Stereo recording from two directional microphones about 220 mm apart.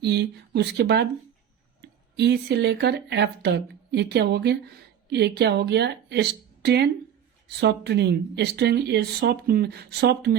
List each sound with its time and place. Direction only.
0.0 s speech: 50° right (ahead or behind)